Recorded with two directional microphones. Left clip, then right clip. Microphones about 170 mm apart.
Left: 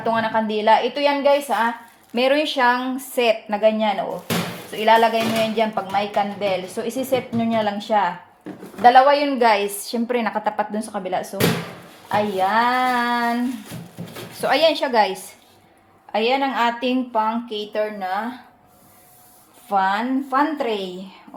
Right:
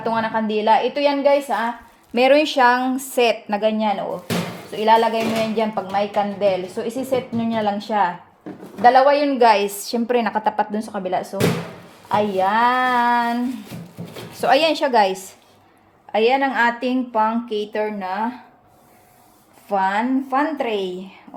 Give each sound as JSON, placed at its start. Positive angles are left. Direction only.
{"t": 0.0, "sound": "speech", "side_deg": -30}
{"t": 2.1, "sound": "a woman's voice", "side_deg": -40}
{"t": 16.1, "sound": "speech", "side_deg": -25}
{"t": 19.7, "sound": "speech", "side_deg": -25}